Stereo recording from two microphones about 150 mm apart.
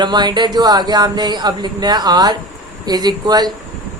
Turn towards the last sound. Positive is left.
turn(degrees=-25)  # may be behind; listen again after turning